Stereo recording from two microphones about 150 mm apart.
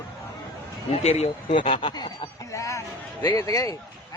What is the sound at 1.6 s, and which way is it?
Speech, 35° left (ahead or behind).